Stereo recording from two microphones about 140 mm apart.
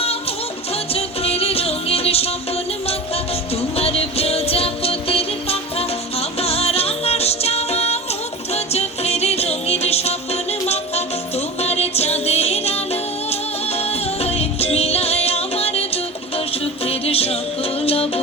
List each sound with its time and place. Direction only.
0.0 s music: 45° left (ahead or behind)
3.5 s music: 45° left (ahead or behind)